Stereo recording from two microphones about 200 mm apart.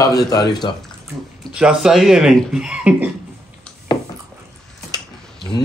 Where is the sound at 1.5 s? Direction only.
5° right (ahead or behind).